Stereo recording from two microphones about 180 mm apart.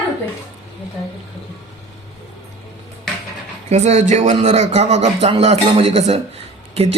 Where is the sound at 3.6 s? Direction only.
40° right (ahead or behind).